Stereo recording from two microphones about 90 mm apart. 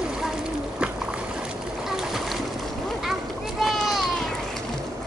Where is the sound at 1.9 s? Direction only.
5° right (ahead or behind).